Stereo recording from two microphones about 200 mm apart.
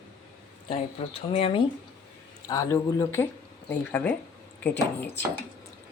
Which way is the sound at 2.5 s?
15° left (ahead or behind).